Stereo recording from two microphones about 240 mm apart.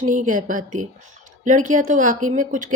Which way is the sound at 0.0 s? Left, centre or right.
Right.